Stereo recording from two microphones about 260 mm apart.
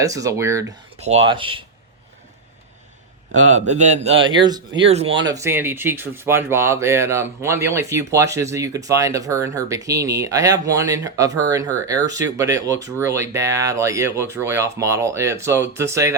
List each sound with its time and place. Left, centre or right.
0.0 s speech: centre
0.9 s speech: right
3.7 s speech: right
5.3 s speech: centre